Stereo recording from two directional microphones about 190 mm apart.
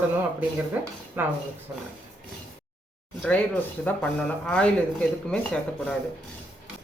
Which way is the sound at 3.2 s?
5° left (ahead or behind).